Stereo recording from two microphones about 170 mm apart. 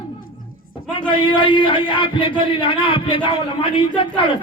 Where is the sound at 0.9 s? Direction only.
30° left (ahead or behind).